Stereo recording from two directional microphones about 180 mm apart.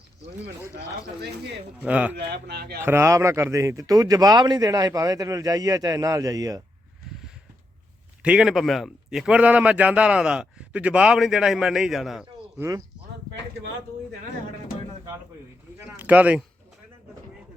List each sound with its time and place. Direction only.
1.8 s speech: 5° right (ahead or behind)
2.1 s speech: 65° right (ahead or behind)
2.8 s speech: 15° right (ahead or behind)
8.2 s a man's voice: 5° right (ahead or behind)
12.5 s speech: 15° right (ahead or behind)
16.0 s speech: 10° right (ahead or behind)